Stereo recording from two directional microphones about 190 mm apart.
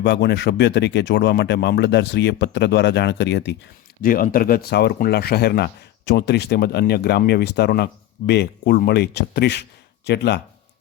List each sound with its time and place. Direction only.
0.0 s speech: 65° left (ahead or behind)
4.0 s speech: 50° left (ahead or behind)